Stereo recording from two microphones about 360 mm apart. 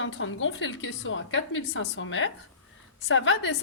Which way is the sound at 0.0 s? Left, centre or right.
Left.